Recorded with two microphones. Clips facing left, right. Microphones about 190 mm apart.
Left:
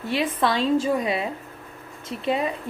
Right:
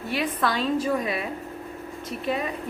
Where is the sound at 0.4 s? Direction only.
25° left (ahead or behind).